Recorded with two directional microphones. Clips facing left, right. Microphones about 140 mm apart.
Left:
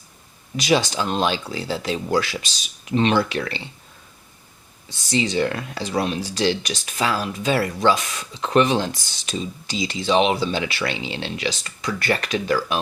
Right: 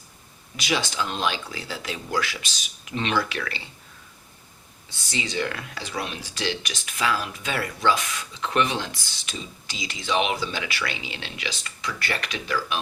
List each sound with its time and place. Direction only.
0.5 s speech: 40° left (ahead or behind)
5.1 s speech: 35° left (ahead or behind)